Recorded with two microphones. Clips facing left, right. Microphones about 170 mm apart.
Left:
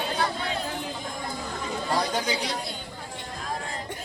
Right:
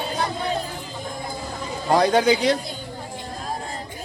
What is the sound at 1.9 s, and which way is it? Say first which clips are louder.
Speech: right 11 dB; 65° right (ahead or behind).